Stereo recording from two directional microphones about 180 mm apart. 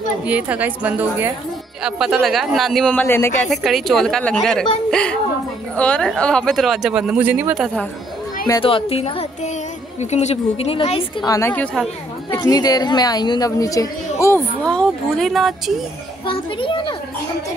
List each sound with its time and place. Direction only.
0.2 s a woman's voice: 10° right (ahead or behind)
8.6 s a woman's voice: 30° left (ahead or behind); by 11.9 s 5° left (ahead or behind)
12.3 s speech: 20° left (ahead or behind); by 15.8 s centre (ahead or behind)
16.3 s speech: 30° left (ahead or behind)